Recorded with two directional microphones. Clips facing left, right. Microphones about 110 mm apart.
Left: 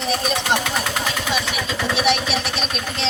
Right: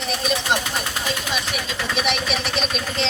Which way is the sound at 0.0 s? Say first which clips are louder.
Left 4 dB; 40° left (ahead or behind).